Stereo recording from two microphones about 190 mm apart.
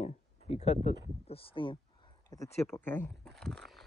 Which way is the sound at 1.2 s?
30° left (ahead or behind).